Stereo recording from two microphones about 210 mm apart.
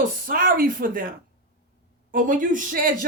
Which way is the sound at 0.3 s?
40° right (ahead or behind).